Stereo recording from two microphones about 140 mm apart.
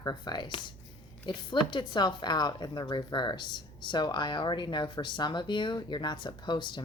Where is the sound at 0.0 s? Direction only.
30° left (ahead or behind).